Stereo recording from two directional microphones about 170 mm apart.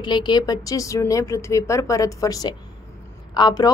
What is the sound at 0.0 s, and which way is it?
Speech, 25° left (ahead or behind).